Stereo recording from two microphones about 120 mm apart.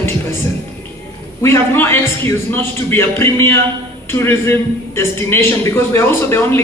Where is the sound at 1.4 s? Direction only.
20° left (ahead or behind).